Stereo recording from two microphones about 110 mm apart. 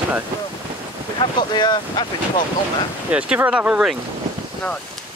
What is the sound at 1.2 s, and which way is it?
Speech, 45° left (ahead or behind).